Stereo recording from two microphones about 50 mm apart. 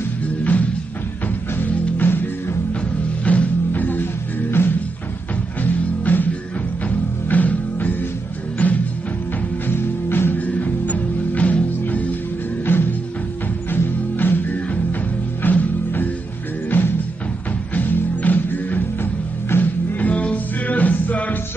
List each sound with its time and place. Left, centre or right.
0.4 s music: left
2.0 s music: left
3.3 s music: left
9.7 s music: left
10.4 s music: left
12.6 s music: left